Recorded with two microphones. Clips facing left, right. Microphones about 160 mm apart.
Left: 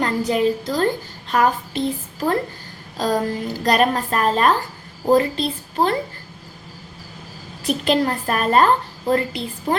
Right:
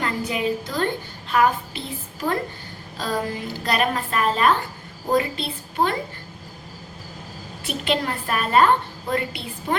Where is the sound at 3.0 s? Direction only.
40° left (ahead or behind).